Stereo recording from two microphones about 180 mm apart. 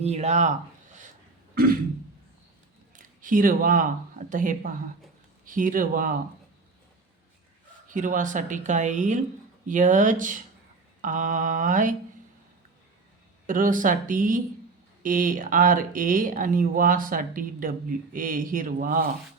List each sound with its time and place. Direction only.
0.0 s speech: 35° right (ahead or behind)
2.9 s a sound: 50° right (ahead or behind)
4.3 s speech: 50° right (ahead or behind)
7.9 s speech: 45° right (ahead or behind)
13.5 s speech: 45° right (ahead or behind)